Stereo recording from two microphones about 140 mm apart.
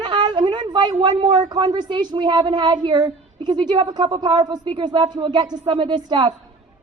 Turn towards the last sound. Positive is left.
turn(degrees=-30)  # may be behind; listen again after turning